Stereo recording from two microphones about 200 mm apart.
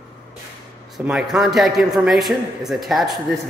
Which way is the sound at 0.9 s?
Centre (ahead or behind).